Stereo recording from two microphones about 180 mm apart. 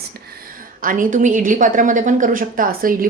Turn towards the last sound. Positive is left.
turn(degrees=-50)  # may be behind; listen again after turning